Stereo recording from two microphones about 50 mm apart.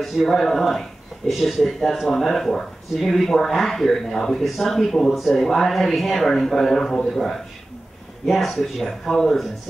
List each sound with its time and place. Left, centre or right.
0.0 s speech: centre